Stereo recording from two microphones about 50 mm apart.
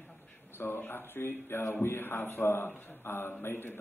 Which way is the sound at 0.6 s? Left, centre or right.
Left.